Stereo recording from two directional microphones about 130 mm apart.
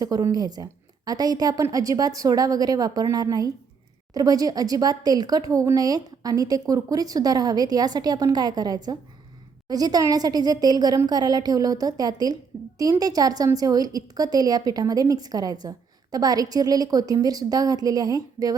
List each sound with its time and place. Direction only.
0.0 s a woman's voice: 30° right (ahead or behind)